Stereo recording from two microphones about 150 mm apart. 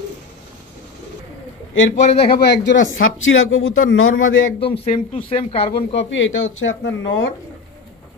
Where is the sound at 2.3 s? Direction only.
90° left.